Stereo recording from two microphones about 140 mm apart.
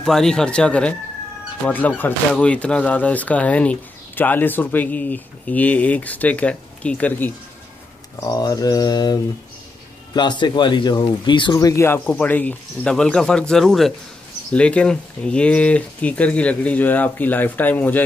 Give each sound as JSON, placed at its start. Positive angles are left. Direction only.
{"t": 0.0, "sound": "speech", "side_deg": 5}
{"t": 8.2, "sound": "speech", "side_deg": 25}
{"t": 11.7, "sound": "speech", "side_deg": 15}